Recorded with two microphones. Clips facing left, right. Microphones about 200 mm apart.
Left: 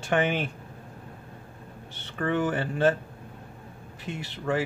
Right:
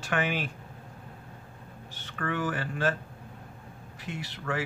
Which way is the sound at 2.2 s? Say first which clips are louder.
Left 5 dB; 25° left (ahead or behind).